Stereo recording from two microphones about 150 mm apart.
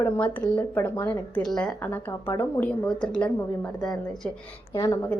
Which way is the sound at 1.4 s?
5° left (ahead or behind).